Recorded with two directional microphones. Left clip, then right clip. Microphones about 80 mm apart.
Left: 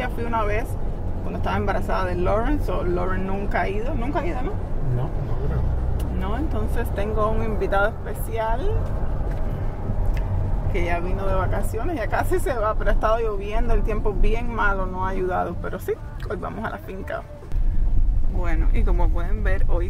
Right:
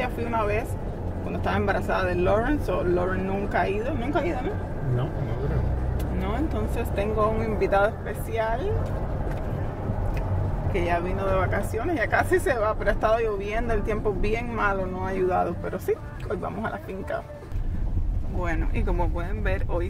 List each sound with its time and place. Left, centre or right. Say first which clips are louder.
0.0 s speech: left 1 dB; centre
4.0 s speech: even; centre
7.0 s speech: even; centre
7.6 s speech: even; centre
8.4 s speech: left 1 dB; centre
10.7 s speech: right 1 dB; centre
11.3 s speech: even; centre
18.4 s speech: right 1 dB; centre